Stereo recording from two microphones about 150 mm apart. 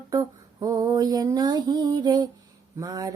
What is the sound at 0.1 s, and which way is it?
Female singing, 25° right (ahead or behind).